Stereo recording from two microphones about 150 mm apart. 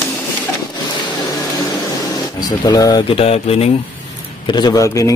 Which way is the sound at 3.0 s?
40° left (ahead or behind).